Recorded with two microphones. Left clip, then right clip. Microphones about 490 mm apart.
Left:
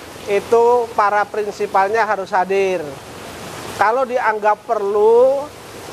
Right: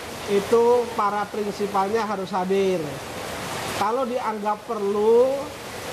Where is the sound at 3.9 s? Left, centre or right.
Left.